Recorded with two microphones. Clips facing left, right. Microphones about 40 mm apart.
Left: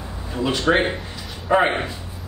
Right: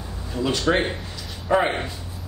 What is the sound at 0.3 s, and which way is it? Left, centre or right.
A man's voice, centre.